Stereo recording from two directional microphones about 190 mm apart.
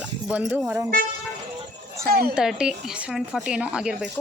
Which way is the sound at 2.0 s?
55° right (ahead or behind).